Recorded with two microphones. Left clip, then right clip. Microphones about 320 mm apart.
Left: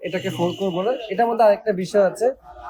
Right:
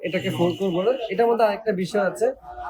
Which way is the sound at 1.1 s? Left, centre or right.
Left.